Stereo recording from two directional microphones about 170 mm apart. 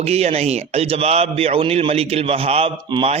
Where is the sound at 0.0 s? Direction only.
40° right (ahead or behind).